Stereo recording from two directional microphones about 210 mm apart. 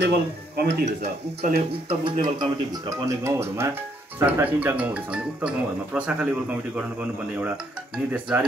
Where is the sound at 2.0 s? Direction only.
20° right (ahead or behind); by 6.3 s 5° right (ahead or behind).